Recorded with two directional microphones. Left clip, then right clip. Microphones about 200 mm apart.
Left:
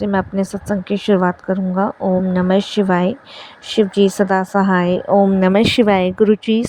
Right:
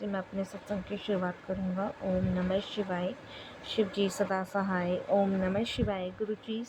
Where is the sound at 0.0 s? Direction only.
50° left (ahead or behind).